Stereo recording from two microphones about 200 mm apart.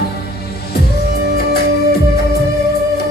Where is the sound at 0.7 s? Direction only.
50° left (ahead or behind).